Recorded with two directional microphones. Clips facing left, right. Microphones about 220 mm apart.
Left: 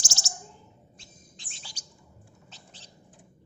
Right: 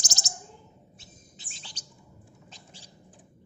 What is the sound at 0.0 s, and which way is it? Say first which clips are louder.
Bird: even; 20° right (ahead or behind).